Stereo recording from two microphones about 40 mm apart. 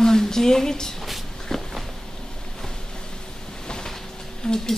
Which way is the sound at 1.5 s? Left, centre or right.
Centre.